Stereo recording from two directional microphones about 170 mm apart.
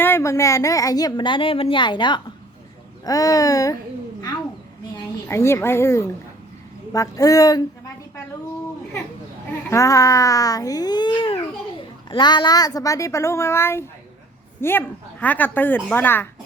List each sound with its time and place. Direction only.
0.0 s speech: 15° left (ahead or behind)
5.3 s a woman's voice: 15° left (ahead or behind)
9.6 s a woman's voice: 20° left (ahead or behind)